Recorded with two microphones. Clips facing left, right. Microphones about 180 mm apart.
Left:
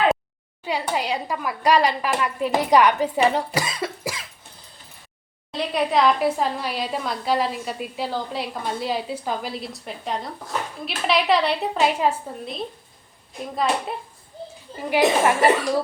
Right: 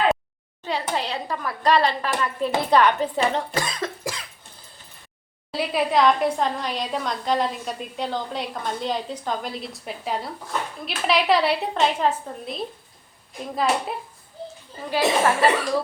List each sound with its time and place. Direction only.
0.6 s a woman's voice: 10° left (ahead or behind)
5.5 s a woman's voice: 5° right (ahead or behind)
14.8 s a woman's voice: 15° left (ahead or behind)